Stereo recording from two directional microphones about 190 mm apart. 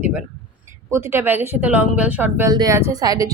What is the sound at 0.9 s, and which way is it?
A woman's voice, 15° right (ahead or behind).